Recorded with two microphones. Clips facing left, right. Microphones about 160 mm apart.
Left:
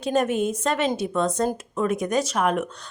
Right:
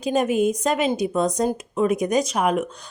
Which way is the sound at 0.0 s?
10° right (ahead or behind).